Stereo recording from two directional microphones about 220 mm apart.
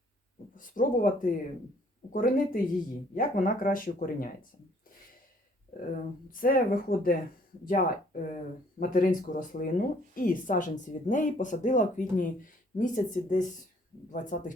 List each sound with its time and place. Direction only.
0.5 s speech: 40° left (ahead or behind)
6.3 s speech: 40° left (ahead or behind)